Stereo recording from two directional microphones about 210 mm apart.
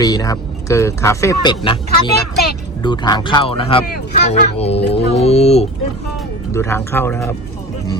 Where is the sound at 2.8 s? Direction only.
20° left (ahead or behind).